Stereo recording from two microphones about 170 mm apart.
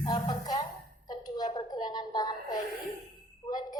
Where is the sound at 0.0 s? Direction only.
25° left (ahead or behind).